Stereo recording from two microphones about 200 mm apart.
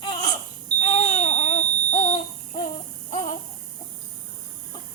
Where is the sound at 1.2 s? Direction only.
35° left (ahead or behind).